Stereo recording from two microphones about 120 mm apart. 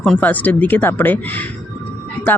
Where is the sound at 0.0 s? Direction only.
10° left (ahead or behind).